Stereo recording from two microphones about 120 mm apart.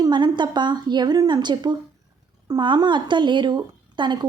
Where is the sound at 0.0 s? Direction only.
40° right (ahead or behind).